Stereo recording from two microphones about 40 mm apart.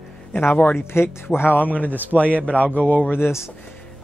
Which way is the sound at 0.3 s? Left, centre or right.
Left.